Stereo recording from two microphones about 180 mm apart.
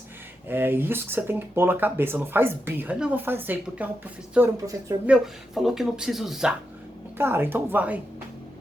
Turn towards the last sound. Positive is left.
turn(degrees=-10)  # may be behind; listen again after turning